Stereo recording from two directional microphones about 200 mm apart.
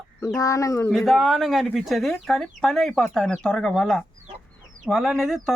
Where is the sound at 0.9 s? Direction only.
Centre (ahead or behind).